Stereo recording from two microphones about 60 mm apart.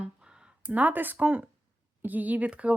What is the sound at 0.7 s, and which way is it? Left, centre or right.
Speech, right.